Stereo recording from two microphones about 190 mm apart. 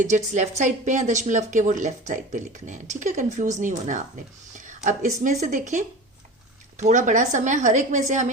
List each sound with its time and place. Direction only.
0.0 s a woman's voice: 40° right (ahead or behind)